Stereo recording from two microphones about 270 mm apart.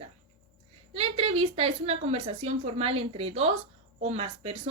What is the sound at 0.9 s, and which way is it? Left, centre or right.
Speech, right.